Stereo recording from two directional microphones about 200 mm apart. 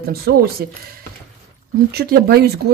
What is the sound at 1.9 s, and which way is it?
Speech, 55° right (ahead or behind).